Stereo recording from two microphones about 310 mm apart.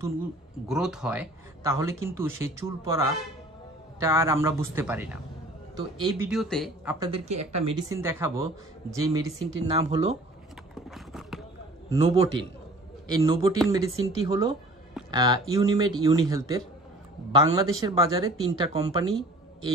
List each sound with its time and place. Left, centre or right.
0.7 s speech: centre
7.1 s speech: right
7.9 s speech: centre
10.7 s clip-clop: centre
11.9 s speech: centre